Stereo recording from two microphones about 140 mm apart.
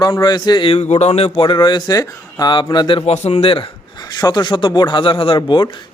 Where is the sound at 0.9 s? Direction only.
50° left (ahead or behind).